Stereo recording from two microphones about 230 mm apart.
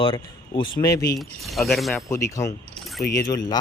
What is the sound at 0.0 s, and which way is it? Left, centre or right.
Speech, left.